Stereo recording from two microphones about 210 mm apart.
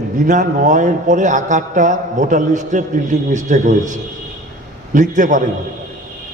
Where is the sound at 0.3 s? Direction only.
40° right (ahead or behind).